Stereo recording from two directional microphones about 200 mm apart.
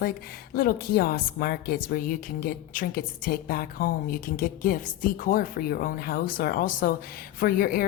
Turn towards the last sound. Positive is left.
turn(degrees=45)  # may be behind; listen again after turning